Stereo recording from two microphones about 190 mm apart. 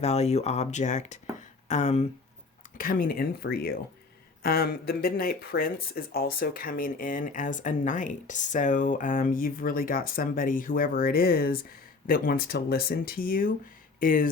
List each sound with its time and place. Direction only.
0.0 s speech: 35° left (ahead or behind)
2.7 s speech: 45° left (ahead or behind)